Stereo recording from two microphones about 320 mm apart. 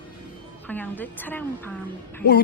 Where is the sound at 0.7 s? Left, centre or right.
Centre.